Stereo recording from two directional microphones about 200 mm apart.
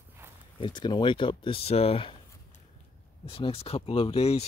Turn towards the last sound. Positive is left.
turn(degrees=30)  # may be behind; listen again after turning